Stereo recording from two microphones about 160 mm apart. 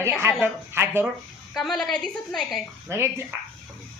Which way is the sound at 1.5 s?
Centre (ahead or behind).